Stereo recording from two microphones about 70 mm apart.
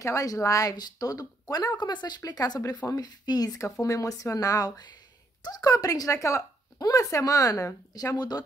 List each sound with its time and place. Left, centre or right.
0.0 s speech: left
3.8 s speech: left